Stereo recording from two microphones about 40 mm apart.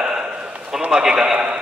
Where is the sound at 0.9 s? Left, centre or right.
Centre.